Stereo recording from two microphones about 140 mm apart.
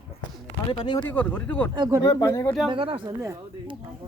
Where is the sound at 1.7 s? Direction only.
30° right (ahead or behind).